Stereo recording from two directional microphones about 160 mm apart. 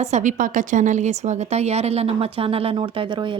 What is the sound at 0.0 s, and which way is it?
Speech, 50° right (ahead or behind).